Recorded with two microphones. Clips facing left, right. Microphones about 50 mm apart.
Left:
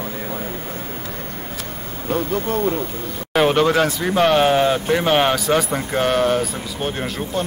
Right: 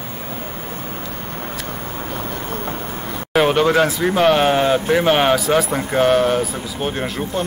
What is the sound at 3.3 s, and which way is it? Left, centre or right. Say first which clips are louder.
Speech: right 1 dB; centre.